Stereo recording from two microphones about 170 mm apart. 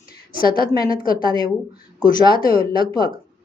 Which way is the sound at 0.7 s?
20° left (ahead or behind).